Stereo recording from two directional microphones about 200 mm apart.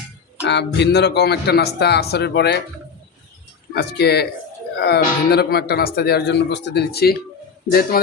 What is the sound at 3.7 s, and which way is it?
A man's voice, 55° left (ahead or behind).